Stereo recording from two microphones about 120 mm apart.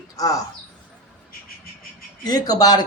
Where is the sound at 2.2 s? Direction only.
30° left (ahead or behind).